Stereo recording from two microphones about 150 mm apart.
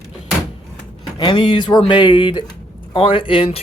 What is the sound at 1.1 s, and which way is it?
Speech, 30° left (ahead or behind).